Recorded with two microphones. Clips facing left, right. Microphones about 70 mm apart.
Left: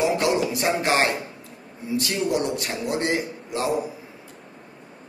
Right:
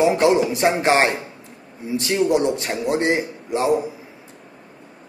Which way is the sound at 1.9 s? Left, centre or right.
Right.